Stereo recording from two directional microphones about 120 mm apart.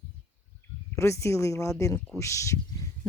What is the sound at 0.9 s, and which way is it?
A woman's voice, 25° left (ahead or behind).